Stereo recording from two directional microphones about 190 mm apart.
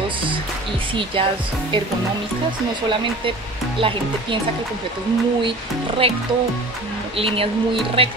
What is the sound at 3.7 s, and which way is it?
Speech, 25° right (ahead or behind).